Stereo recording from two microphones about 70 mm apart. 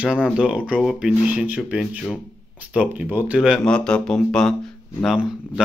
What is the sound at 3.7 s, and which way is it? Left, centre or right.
Speech, centre.